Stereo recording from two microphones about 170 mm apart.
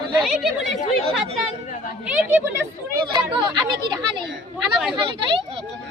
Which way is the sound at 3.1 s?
25° right (ahead or behind).